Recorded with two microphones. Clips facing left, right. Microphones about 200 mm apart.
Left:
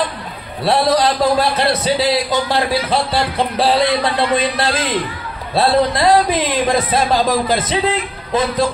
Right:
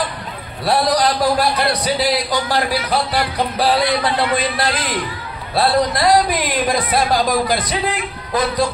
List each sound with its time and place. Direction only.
0.7 s a man's voice: 25° left (ahead or behind)